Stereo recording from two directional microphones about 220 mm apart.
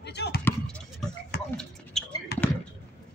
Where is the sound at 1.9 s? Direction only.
Centre (ahead or behind).